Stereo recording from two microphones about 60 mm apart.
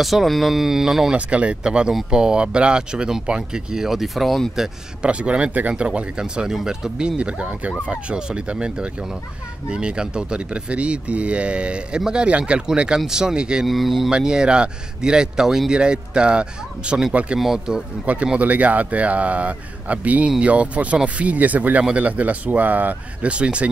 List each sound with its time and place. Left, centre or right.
0.0 s speech: centre
1.1 s speech: right; by 4.6 s centre
5.0 s speech: centre
13.7 s speech: centre
17.4 s speech: centre
18.0 s speech: right